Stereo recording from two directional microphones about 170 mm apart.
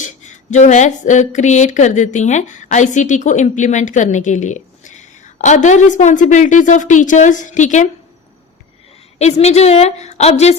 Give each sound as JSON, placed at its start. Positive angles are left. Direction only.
{"t": 0.0, "sound": "speech", "side_deg": 45}
{"t": 9.1, "sound": "a woman's voice", "side_deg": 40}